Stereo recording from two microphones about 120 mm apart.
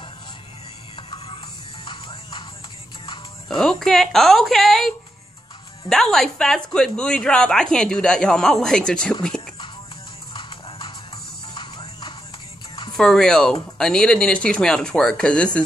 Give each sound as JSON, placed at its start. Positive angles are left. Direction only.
{"t": 0.9, "sound": "music", "side_deg": 45}
{"t": 3.4, "sound": "speech", "side_deg": 5}
{"t": 11.5, "sound": "music", "side_deg": 40}
{"t": 12.9, "sound": "speech", "side_deg": 5}